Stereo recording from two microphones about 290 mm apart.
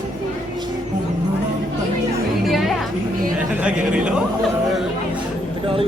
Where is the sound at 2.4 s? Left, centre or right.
Centre.